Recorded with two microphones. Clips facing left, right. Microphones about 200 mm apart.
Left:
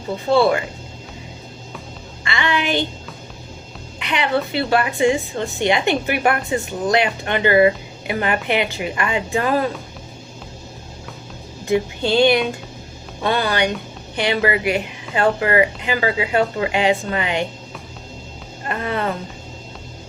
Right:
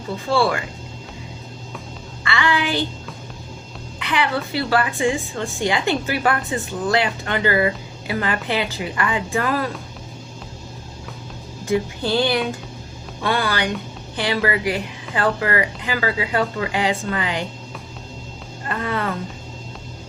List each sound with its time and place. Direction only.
0.3 s speech: 20° left (ahead or behind)
2.2 s a woman's voice: 20° left (ahead or behind)
4.0 s speech: 20° left (ahead or behind)
11.7 s speech: 15° left (ahead or behind)
18.7 s a sound: 20° left (ahead or behind)